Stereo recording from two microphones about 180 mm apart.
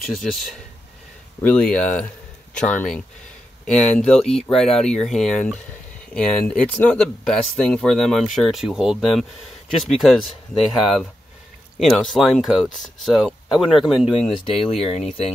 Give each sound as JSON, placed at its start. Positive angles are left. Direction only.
{"t": 0.0, "sound": "speech", "side_deg": 0}
{"t": 14.4, "sound": "speech", "side_deg": 30}